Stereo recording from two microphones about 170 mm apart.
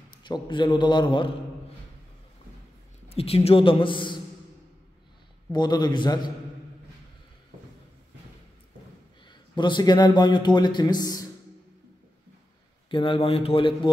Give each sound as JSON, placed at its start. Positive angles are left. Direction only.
{"t": 0.2, "sound": "a man's voice", "side_deg": 25}
{"t": 3.1, "sound": "a man's voice", "side_deg": 35}
{"t": 5.5, "sound": "a man's voice", "side_deg": 25}
{"t": 9.3, "sound": "a man's voice", "side_deg": 25}
{"t": 12.9, "sound": "a man's voice", "side_deg": 30}